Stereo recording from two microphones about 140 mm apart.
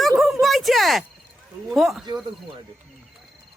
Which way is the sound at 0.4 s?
Centre (ahead or behind).